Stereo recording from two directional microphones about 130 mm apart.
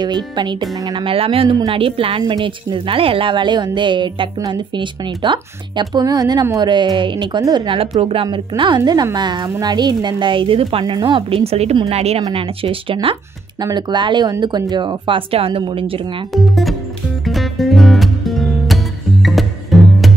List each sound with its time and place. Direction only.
0.0 s speech: 35° right (ahead or behind)
13.6 s speech: 30° right (ahead or behind)
16.3 s speech: centre (ahead or behind)
17.3 s music: centre (ahead or behind)